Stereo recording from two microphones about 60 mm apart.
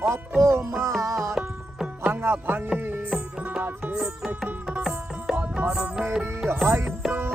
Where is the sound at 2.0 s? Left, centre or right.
Right.